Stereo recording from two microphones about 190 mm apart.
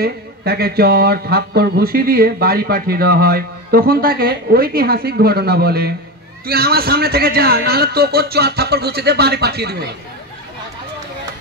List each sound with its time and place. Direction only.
0.0 s a man's voice: 55° right (ahead or behind)